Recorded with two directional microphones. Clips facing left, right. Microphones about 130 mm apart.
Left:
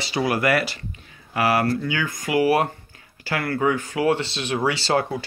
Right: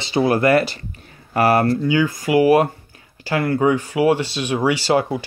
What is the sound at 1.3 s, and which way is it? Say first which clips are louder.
Speech: right 5 dB; 45° right (ahead or behind).